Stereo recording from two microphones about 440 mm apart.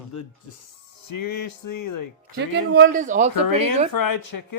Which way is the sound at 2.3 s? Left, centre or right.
Right.